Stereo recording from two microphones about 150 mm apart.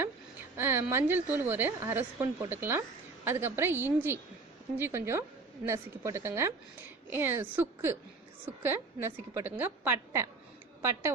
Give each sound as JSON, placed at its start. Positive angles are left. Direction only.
{"t": 0.5, "sound": "a woman's voice", "side_deg": -15}